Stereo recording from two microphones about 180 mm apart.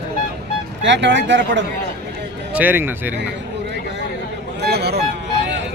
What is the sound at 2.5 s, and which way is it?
Speech, 10° right (ahead or behind).